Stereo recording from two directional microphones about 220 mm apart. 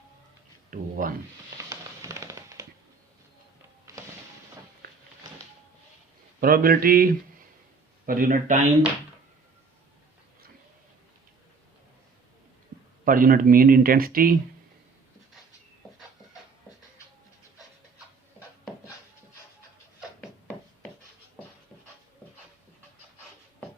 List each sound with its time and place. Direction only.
0.7 s a sound: 40° right (ahead or behind)
1.5 s music: 15° right (ahead or behind)
6.4 s speech: 40° right (ahead or behind)
13.1 s speech: 40° right (ahead or behind)